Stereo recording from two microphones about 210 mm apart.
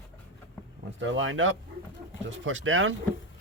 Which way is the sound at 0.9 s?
65° right (ahead or behind).